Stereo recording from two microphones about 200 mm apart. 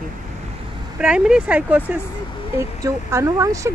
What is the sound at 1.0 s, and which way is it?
Speech, 5° right (ahead or behind).